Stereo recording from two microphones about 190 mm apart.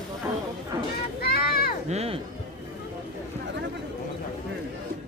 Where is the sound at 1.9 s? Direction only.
35° right (ahead or behind).